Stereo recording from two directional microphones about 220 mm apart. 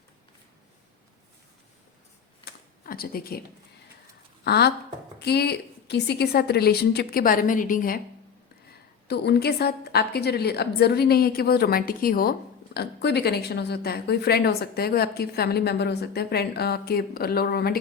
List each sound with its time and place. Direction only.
2.4 s a sound: 45° left (ahead or behind)
4.4 s speech: 45° left (ahead or behind)
9.0 s speech: 50° left (ahead or behind)